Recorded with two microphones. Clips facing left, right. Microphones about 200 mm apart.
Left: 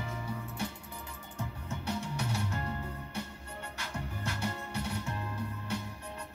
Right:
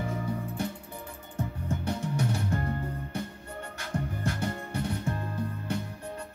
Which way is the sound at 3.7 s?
50° right (ahead or behind).